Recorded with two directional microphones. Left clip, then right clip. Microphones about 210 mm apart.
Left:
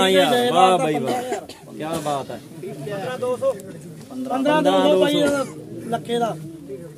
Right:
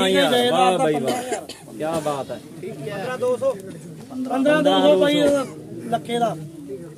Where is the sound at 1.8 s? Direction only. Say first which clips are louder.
Right 1 dB; 55° left (ahead or behind).